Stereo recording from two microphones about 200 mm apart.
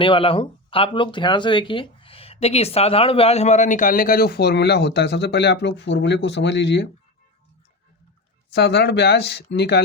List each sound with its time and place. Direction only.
0.0 s speech: 25° left (ahead or behind); by 6.8 s 60° left (ahead or behind)
8.5 s speech: 55° left (ahead or behind)